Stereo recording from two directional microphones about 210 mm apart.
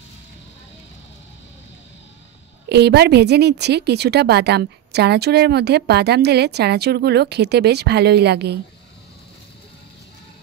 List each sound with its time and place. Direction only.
2.7 s speech: 50° right (ahead or behind)